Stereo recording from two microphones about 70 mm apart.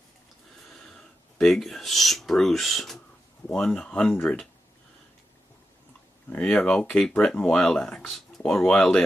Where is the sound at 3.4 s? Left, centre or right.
Centre.